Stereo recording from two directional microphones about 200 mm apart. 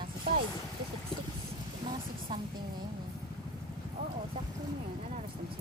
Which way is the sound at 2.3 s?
20° right (ahead or behind).